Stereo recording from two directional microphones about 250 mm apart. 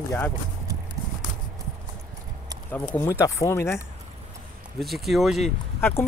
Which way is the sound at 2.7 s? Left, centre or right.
Centre.